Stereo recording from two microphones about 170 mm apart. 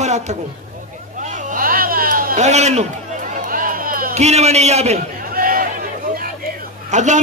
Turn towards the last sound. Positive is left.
turn(degrees=-45)  # may be behind; listen again after turning